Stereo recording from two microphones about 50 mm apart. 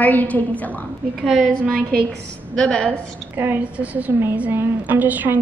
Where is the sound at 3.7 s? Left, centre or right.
Right.